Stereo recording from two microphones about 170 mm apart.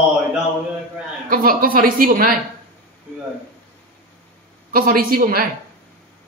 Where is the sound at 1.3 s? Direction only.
55° right (ahead or behind).